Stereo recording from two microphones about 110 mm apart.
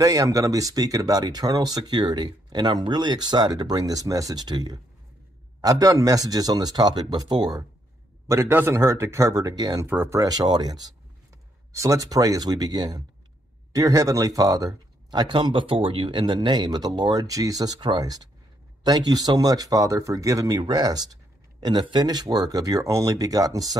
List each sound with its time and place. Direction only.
0.0 s speech: 30° right (ahead or behind)
8.3 s speech: 20° right (ahead or behind)
9.8 s speech: 25° right (ahead or behind)